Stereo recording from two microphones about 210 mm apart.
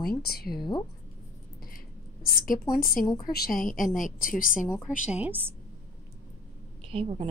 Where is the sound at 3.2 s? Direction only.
45° left (ahead or behind).